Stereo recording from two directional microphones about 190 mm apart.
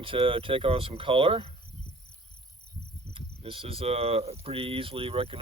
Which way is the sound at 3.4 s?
30° right (ahead or behind).